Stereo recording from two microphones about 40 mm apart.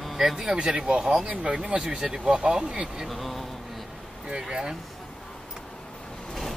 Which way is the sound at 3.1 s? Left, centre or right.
Centre.